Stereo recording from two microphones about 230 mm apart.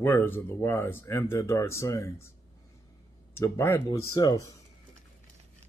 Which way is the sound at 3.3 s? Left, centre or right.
Centre.